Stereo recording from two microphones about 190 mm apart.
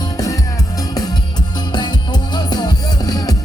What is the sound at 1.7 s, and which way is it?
Music, 25° left (ahead or behind).